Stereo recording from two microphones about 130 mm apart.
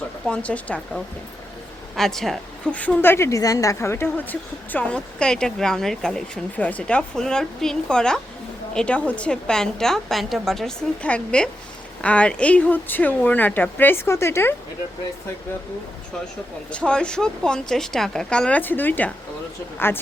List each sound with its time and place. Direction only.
0.3 s a woman's voice: 10° left (ahead or behind)
16.7 s a woman's voice: 10° left (ahead or behind)